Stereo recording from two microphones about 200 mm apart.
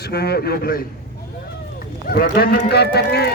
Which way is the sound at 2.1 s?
50° left (ahead or behind).